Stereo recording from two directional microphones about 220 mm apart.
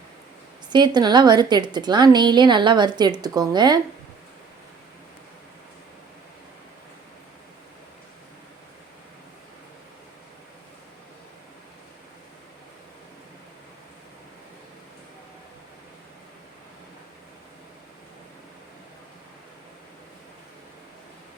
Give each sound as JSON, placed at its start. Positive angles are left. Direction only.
{"t": 0.7, "sound": "a woman's voice", "side_deg": -20}